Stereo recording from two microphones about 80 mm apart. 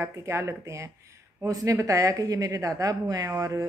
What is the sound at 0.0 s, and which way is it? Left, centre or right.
A woman's voice, right.